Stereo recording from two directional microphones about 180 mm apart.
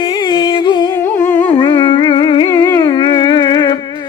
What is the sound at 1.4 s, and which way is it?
Music, 25° left (ahead or behind).